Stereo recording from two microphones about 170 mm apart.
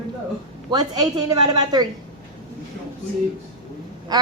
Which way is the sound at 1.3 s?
25° right (ahead or behind).